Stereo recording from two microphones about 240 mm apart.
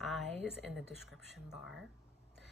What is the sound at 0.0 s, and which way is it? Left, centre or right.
A woman's voice, centre.